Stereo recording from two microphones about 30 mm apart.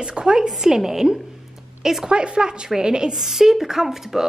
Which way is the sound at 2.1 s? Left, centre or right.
Right.